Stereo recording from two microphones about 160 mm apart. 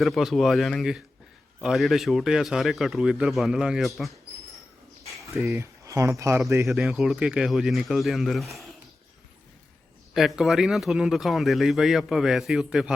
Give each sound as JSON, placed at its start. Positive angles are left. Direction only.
{"t": 0.0, "sound": "speech", "side_deg": 0}
{"t": 5.4, "sound": "speech", "side_deg": -15}
{"t": 6.7, "sound": "speech", "side_deg": 0}
{"t": 10.2, "sound": "speech", "side_deg": 0}